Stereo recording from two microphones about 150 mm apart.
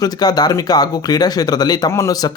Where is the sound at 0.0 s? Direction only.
25° left (ahead or behind).